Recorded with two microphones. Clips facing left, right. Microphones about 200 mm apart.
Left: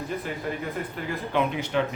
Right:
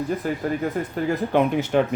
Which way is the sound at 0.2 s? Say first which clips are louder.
Right 7 dB; 45° right (ahead or behind).